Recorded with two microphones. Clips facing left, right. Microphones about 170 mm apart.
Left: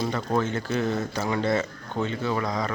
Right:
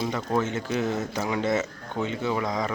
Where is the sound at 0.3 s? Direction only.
15° right (ahead or behind).